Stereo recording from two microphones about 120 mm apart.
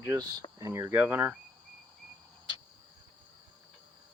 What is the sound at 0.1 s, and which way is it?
Speech, 30° right (ahead or behind).